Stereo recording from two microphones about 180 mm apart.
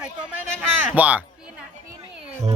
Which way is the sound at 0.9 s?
10° right (ahead or behind).